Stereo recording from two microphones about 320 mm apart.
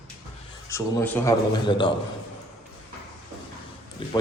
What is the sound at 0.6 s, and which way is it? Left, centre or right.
Speech, centre.